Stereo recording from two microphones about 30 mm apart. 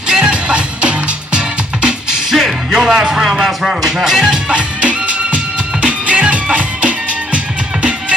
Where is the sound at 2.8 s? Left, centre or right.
Centre.